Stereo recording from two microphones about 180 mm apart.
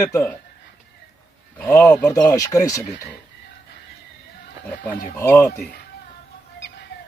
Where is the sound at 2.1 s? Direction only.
20° left (ahead or behind).